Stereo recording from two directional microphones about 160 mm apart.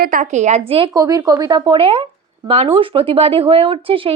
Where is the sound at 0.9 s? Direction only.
20° right (ahead or behind).